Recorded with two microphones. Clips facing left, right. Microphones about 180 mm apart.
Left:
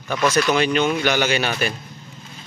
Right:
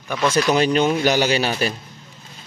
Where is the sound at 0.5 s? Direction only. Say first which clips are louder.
Right 2 dB; 35° right (ahead or behind).